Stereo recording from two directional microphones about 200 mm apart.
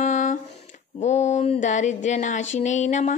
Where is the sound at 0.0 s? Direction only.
40° left (ahead or behind).